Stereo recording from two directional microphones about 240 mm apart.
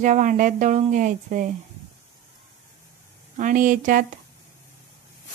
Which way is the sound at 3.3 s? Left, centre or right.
Right.